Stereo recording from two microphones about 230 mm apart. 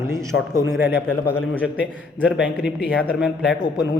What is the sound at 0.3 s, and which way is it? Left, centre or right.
Speech, left.